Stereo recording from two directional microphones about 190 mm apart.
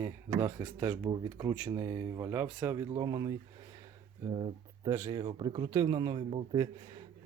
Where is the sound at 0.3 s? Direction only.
10° right (ahead or behind).